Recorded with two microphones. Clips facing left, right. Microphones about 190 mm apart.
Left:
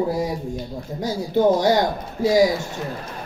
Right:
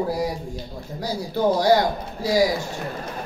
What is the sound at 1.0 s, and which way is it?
Speech, 20° left (ahead or behind).